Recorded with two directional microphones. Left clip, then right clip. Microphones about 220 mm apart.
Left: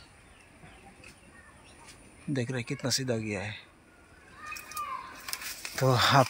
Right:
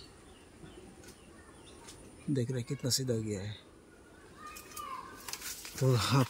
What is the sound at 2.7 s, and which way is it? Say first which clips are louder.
Speech: left 3 dB; 35° left (ahead or behind).